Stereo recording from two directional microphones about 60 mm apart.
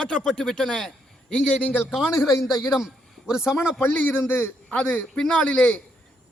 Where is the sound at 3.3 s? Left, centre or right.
Centre.